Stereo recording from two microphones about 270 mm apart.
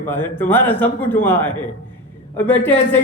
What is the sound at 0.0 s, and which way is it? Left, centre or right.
A man's voice, centre.